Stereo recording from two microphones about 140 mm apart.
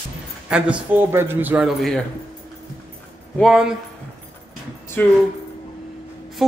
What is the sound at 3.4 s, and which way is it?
Speech, 5° right (ahead or behind).